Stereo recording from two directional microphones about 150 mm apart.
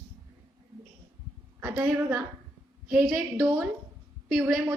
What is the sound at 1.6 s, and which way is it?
A woman's voice, 15° right (ahead or behind).